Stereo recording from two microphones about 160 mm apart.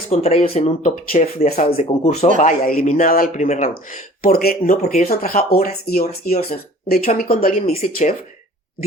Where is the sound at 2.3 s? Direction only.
55° left (ahead or behind).